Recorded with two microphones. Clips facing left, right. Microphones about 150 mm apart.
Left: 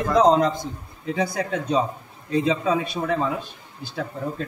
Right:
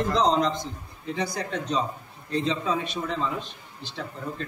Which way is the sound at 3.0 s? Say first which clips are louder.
Left 5 dB; 25° left (ahead or behind).